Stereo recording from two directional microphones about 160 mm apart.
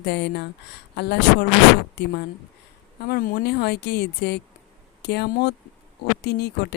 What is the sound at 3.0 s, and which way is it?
Speech, 70° left (ahead or behind).